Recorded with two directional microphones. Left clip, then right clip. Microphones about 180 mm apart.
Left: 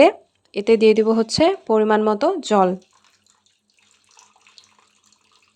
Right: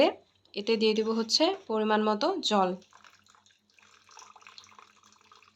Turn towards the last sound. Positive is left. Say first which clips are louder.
# left 2 dB
turn(degrees=55)  # may be behind; listen again after turning